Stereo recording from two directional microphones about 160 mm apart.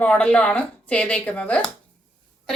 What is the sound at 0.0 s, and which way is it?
A woman's voice, 10° left (ahead or behind).